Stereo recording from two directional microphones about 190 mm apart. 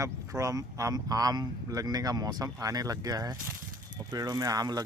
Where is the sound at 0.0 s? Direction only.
15° right (ahead or behind).